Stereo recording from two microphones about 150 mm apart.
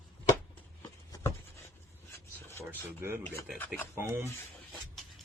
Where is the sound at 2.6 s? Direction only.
15° right (ahead or behind).